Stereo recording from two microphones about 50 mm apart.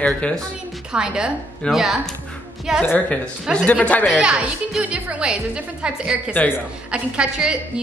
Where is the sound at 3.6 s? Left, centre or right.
Left.